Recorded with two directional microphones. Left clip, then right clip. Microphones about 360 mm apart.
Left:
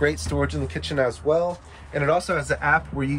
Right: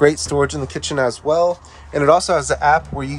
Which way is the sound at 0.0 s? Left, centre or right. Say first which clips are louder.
Right 8 dB; right.